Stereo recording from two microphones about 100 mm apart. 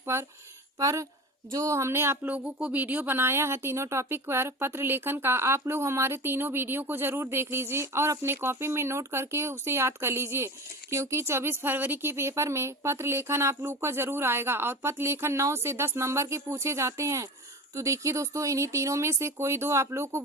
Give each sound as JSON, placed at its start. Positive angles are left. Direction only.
{"t": 0.0, "sound": "speech", "side_deg": -25}